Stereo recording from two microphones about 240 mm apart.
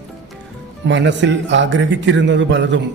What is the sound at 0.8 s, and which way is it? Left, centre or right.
A man's voice, right.